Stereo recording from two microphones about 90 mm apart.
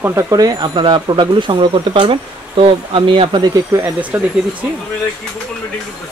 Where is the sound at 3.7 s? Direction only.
35° right (ahead or behind).